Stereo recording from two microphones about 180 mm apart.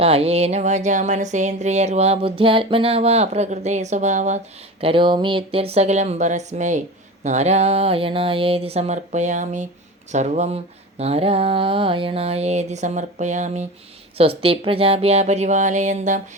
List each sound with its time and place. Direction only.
0.0 s speech: 35° right (ahead or behind)
4.8 s speech: 30° right (ahead or behind)